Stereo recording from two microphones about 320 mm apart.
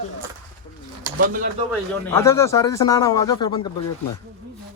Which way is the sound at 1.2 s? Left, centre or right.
Right.